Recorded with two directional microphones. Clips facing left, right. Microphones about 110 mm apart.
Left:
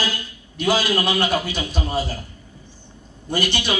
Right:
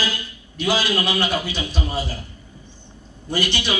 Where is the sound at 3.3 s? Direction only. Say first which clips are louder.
Left 1 dB; 50° left (ahead or behind).